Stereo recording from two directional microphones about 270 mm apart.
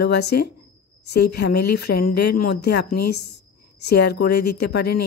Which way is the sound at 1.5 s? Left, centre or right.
Left.